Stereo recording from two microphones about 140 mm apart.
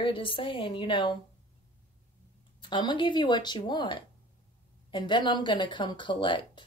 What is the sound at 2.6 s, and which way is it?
Speech, 35° left (ahead or behind).